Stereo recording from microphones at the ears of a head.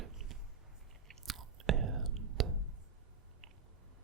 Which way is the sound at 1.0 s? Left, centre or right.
Right.